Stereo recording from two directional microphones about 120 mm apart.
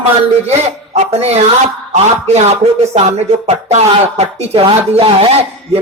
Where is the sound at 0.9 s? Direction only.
60° right (ahead or behind).